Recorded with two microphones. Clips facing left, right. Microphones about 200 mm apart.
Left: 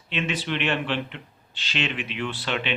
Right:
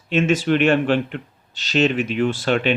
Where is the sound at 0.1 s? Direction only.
45° right (ahead or behind).